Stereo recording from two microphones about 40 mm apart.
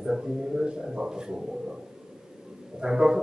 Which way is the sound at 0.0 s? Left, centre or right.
Centre.